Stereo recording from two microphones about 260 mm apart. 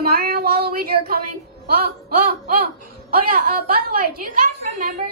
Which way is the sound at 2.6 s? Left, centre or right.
Right.